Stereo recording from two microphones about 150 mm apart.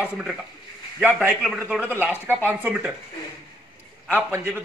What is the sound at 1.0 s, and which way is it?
Speech, 10° right (ahead or behind).